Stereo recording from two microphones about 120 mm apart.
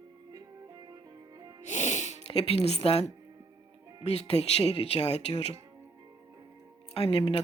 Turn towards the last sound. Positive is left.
turn(degrees=55)  # may be behind; listen again after turning